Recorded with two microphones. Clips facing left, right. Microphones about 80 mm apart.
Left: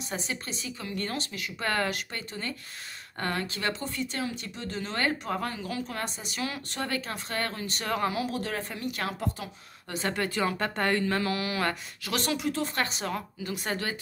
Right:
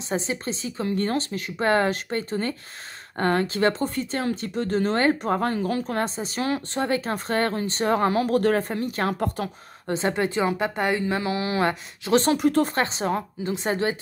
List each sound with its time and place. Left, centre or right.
0.1 s speech: right
8.1 s speech: right
9.4 s speech: right
9.8 s a woman's voice: right
12.4 s speech: right
12.7 s a woman's voice: right